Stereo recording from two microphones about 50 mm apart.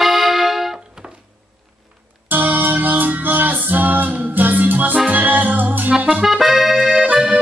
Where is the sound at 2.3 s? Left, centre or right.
Right.